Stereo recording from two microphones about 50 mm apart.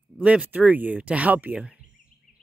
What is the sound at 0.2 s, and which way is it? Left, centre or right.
Speech, right.